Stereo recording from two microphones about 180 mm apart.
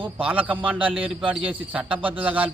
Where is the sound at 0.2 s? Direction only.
5° right (ahead or behind).